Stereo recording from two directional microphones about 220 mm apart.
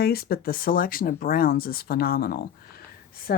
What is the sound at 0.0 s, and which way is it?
Speech, 45° left (ahead or behind).